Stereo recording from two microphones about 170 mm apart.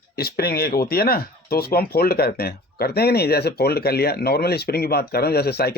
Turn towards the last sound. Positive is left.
turn(degrees=70)  # may be behind; listen again after turning